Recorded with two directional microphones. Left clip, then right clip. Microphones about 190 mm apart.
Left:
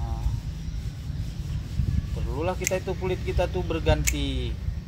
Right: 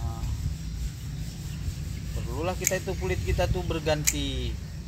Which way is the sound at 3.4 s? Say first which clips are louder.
Left 1 dB; 15° left (ahead or behind).